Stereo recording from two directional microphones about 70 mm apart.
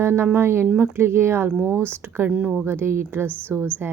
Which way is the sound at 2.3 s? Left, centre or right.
Centre.